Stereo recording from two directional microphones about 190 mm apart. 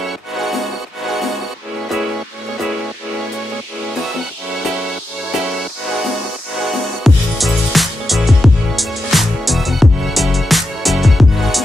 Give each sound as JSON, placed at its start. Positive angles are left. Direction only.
{"t": 7.0, "sound": "music", "side_deg": 0}